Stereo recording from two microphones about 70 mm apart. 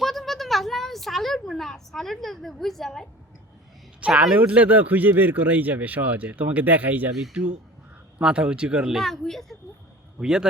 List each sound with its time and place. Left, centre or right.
0.0 s a sound: centre
4.0 s speech: centre
9.0 s speech: centre
10.2 s a man's voice: centre